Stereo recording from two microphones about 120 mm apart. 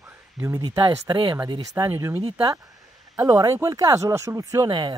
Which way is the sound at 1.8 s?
25° right (ahead or behind).